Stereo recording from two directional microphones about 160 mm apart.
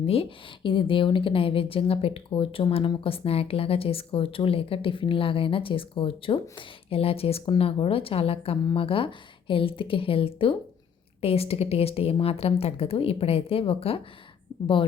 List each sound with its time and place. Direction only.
0.0 s speech: 35° left (ahead or behind)